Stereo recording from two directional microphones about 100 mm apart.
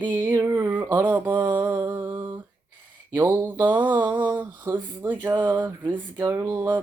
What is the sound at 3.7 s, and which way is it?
Mantra, 20° right (ahead or behind).